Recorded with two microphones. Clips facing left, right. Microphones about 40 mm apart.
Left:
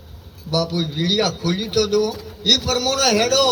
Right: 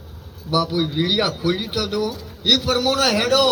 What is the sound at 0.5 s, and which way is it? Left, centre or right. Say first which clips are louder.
A man's voice: right 2 dB; centre.